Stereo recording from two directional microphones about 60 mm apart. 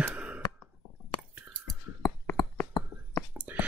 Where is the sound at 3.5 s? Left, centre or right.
Right.